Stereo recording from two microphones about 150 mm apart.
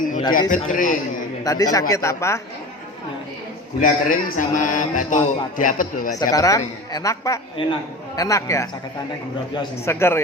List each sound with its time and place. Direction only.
0.3 s a man's voice: 60° left (ahead or behind)
1.5 s a man's voice: 25° left (ahead or behind)
3.8 s a man's voice: 60° left (ahead or behind)
6.3 s a man's voice: 25° left (ahead or behind)
9.8 s a man's voice: 15° left (ahead or behind)